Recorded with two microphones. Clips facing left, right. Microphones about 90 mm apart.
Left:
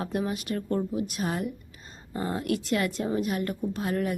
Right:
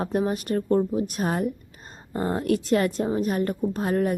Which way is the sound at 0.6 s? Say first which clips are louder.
Right 7 dB; 30° right (ahead or behind).